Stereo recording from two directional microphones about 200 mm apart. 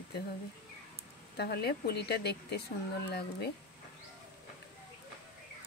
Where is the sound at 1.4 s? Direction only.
55° left (ahead or behind).